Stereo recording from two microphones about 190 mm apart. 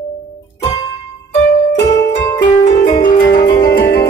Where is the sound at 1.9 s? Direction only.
20° left (ahead or behind).